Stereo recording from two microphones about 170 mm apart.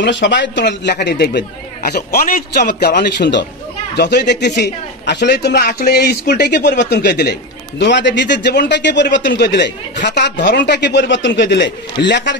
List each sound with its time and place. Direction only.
0.0 s speech: 90° left
3.9 s speech: 75° left (ahead or behind)
7.8 s speech: 90° left